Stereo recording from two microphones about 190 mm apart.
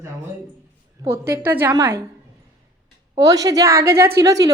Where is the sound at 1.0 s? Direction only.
15° right (ahead or behind).